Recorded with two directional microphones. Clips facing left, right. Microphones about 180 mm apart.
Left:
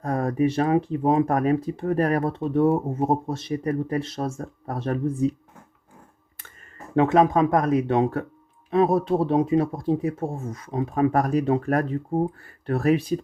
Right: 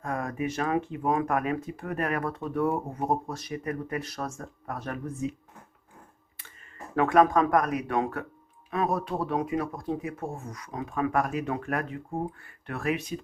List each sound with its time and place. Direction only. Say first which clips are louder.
0.0 s speech: left 8 dB; 35° left (ahead or behind)
6.9 s speech: left 3 dB; 25° left (ahead or behind)